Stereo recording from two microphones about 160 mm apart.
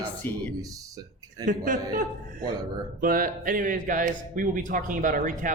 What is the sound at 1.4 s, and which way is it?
Speech, 60° right (ahead or behind).